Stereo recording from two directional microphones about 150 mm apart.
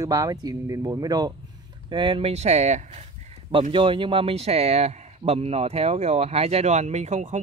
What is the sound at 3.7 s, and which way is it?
A man's voice, 35° right (ahead or behind).